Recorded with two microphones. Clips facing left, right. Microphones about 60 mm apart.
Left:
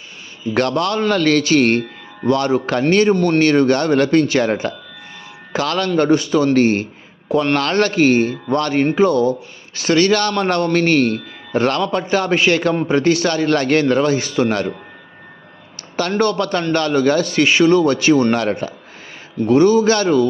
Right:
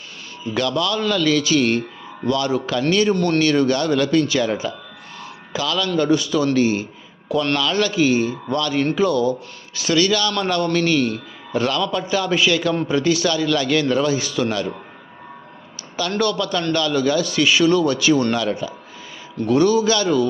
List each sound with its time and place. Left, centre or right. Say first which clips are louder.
0.5 s a man's voice: left 3 dB; left
3.2 s speech: left 3 dB; left
3.4 s a man's voice: left 4 dB; left
8.8 s a man's voice: left 4 dB; left
16.0 s a man's voice: left 4 dB; left
18.3 s a man's voice: left 3 dB; left
19.5 s a man's voice: left 4 dB; left